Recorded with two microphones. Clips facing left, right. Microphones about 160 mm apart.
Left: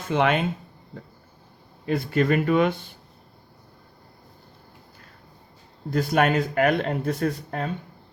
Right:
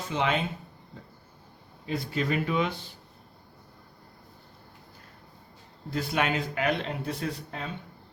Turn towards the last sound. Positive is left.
turn(degrees=50)  # may be behind; listen again after turning